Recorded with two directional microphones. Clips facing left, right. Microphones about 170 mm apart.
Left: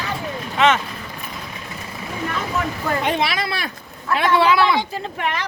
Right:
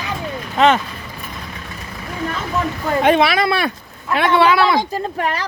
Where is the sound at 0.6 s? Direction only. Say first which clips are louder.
Right 3 dB; 35° right (ahead or behind).